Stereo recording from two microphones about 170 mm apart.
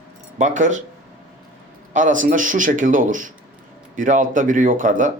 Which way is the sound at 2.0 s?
50° right (ahead or behind).